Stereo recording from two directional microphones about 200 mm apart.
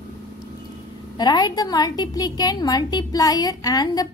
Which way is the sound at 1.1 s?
20° left (ahead or behind).